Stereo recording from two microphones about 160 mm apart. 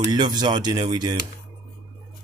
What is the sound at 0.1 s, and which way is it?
Speech, 25° right (ahead or behind).